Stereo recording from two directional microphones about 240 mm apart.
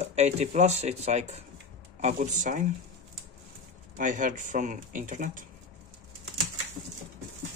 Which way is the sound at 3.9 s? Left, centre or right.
Right.